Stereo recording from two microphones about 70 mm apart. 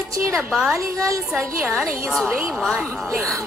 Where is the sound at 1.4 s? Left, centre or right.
Right.